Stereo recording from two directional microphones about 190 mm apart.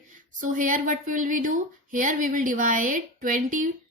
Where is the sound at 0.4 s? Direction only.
45° right (ahead or behind).